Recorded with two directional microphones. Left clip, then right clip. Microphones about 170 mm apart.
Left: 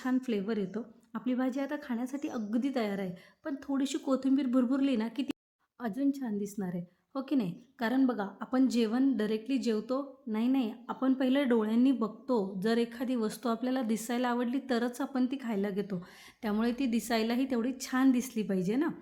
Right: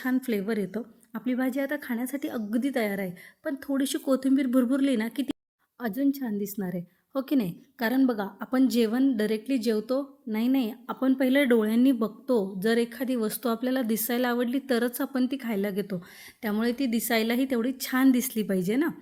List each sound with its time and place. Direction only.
0.0 s a woman's voice: 25° right (ahead or behind)